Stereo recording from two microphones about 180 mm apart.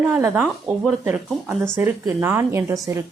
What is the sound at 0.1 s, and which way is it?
Speech, 10° right (ahead or behind).